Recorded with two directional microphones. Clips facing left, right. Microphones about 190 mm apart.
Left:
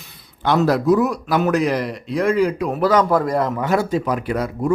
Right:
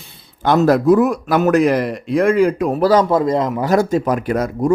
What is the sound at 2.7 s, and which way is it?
Speech, 30° right (ahead or behind).